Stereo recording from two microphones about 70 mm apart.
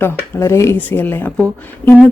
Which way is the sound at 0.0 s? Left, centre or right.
Left.